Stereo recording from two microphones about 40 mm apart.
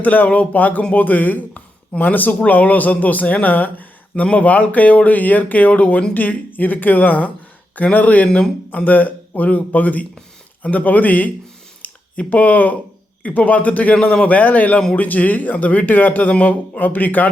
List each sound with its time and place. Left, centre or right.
0.0 s speech: left
4.2 s speech: left
11.8 s a sound: left
12.3 s speech: left
14.3 s speech: left